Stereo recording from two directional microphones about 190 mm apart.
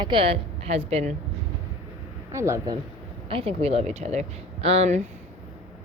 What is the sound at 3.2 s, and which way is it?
Speech, 30° right (ahead or behind).